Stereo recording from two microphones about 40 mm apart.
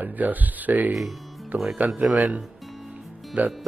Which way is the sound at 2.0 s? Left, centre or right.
Centre.